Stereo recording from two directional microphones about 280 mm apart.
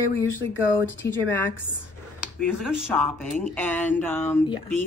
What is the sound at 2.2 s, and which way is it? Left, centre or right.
Speech, centre.